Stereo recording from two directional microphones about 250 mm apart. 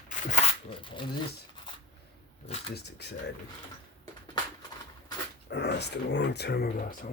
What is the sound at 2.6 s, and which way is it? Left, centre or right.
Speech, left.